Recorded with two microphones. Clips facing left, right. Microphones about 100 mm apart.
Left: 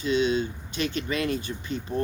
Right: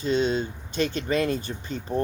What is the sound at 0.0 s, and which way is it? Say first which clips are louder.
Speech: even; 40° right (ahead or behind).